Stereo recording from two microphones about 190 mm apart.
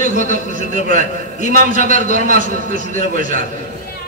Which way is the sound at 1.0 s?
40° left (ahead or behind).